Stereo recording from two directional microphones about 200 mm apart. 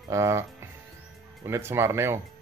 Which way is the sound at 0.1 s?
15° right (ahead or behind).